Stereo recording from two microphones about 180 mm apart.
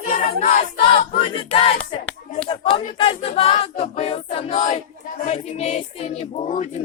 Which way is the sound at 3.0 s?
30° left (ahead or behind).